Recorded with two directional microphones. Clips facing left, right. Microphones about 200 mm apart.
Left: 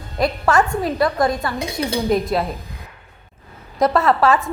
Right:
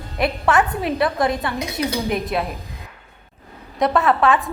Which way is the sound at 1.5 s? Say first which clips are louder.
Left 1 dB; 30° left (ahead or behind).